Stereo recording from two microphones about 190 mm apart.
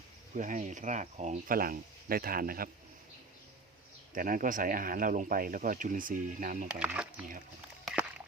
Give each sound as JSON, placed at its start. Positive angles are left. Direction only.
{"t": 0.3, "sound": "speech", "side_deg": -40}
{"t": 4.1, "sound": "speech", "side_deg": -45}
{"t": 6.7, "sound": "speech", "side_deg": -5}